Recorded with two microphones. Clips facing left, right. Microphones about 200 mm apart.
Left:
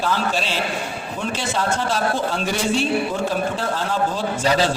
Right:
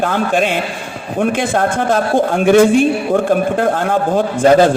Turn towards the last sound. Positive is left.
turn(degrees=-50)  # may be behind; listen again after turning